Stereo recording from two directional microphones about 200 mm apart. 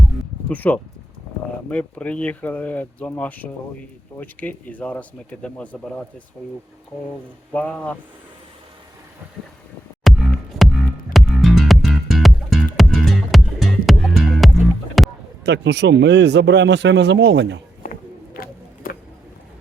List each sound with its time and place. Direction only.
0.4 s speech: 5° left (ahead or behind)
7.5 s speech: 5° left (ahead or behind)
11.1 s music: centre (ahead or behind)
15.4 s speech: 60° right (ahead or behind)
18.3 s a sound: 45° left (ahead or behind)